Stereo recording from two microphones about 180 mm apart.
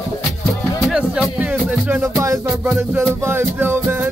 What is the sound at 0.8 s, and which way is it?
Music, 5° right (ahead or behind).